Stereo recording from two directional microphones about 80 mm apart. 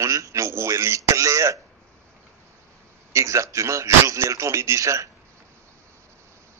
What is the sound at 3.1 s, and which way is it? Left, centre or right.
Speech, right.